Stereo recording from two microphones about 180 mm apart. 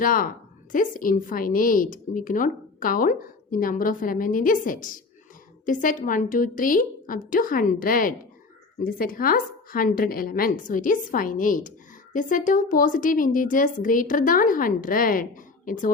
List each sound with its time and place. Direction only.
0.0 s a woman's voice: 50° left (ahead or behind)